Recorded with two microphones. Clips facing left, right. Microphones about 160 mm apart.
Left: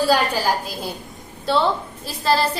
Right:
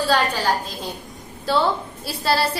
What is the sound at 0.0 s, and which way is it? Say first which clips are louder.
Speech: left 2 dB; 10° left (ahead or behind).